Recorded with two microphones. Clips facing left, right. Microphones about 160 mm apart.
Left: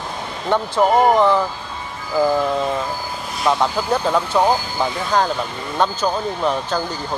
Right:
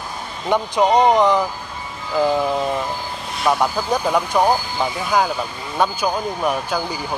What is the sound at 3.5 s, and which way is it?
Speech, 10° right (ahead or behind).